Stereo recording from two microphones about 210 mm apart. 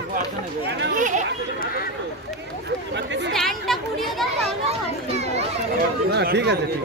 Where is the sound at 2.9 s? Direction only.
55° right (ahead or behind).